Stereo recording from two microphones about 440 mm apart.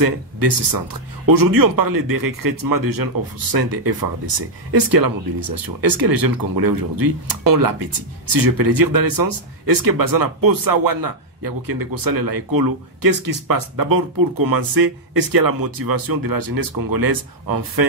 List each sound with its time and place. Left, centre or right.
0.0 s speech: right